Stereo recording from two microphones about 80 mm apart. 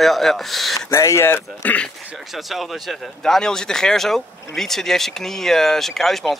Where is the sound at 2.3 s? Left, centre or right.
Centre.